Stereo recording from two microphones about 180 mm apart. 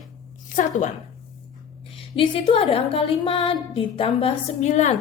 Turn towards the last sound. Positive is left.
turn(degrees=40)  # may be behind; listen again after turning